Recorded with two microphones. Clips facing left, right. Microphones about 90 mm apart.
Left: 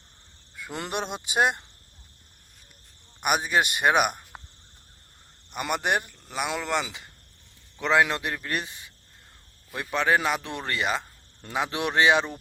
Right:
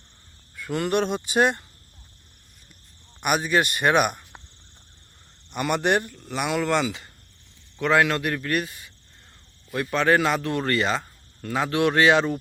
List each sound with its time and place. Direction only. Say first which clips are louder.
0.5 s cricket: right 8 dB; 10° left (ahead or behind)
0.8 s speech: right 8 dB; 15° left (ahead or behind)
3.2 s speech: right 2 dB; 15° left (ahead or behind)
5.5 s a man's voice: right 4 dB; 15° left (ahead or behind)
9.9 s speech: right 3 dB; 15° left (ahead or behind)